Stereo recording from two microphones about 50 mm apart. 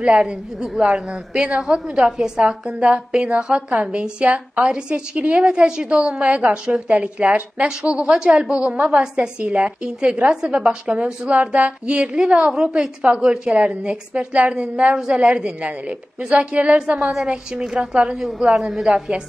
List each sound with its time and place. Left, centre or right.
0.0 s a woman's voice: centre